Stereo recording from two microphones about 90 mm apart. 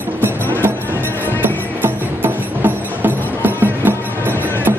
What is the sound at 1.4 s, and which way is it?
Music, 20° right (ahead or behind).